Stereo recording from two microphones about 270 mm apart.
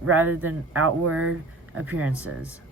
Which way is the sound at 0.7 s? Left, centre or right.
Right.